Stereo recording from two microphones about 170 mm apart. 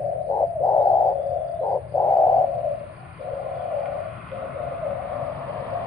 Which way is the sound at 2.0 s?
20° left (ahead or behind).